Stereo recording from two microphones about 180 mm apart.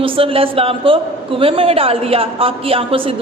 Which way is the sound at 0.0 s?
30° right (ahead or behind).